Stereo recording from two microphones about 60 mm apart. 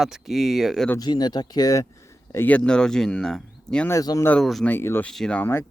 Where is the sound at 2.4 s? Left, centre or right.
Centre.